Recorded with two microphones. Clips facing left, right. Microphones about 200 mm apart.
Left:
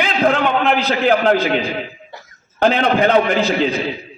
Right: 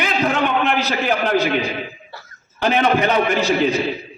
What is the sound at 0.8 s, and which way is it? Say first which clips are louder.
Speech: left 4 dB; 55° left (ahead or behind).